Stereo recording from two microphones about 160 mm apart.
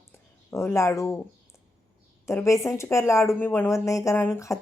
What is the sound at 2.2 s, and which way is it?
Speech, 20° left (ahead or behind).